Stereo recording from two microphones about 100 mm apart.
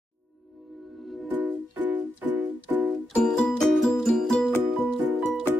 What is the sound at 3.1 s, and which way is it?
Music, 5° left (ahead or behind).